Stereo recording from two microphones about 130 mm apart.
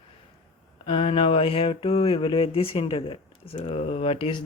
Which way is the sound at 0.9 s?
45° left (ahead or behind).